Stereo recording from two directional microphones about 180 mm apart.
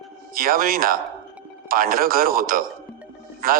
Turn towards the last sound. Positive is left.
turn(degrees=-55)  # may be behind; listen again after turning